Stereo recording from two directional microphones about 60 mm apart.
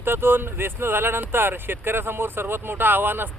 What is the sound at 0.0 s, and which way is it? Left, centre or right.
Speech, right.